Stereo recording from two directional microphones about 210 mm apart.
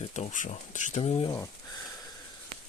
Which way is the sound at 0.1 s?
35° left (ahead or behind).